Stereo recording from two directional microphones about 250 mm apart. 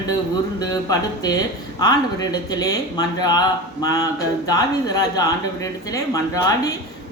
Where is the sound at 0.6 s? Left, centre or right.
Centre.